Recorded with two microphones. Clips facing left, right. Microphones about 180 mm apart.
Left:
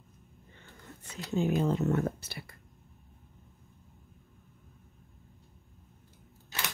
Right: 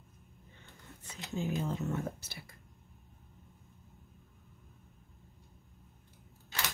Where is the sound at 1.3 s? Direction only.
65° left (ahead or behind).